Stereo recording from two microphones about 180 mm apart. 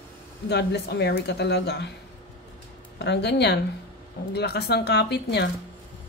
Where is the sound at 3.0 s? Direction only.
70° left (ahead or behind).